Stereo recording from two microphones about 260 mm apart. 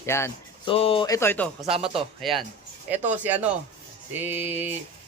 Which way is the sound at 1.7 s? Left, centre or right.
Right.